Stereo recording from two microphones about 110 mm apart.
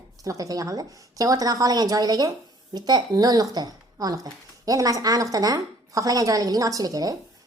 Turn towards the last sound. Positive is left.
turn(degrees=-35)  # may be behind; listen again after turning